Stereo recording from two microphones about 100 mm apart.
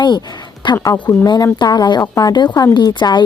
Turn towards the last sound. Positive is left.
turn(degrees=45)  # may be behind; listen again after turning